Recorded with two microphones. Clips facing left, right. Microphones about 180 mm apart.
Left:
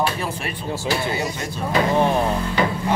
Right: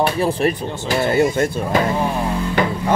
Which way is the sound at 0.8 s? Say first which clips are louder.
Right 8 dB; 55° right (ahead or behind).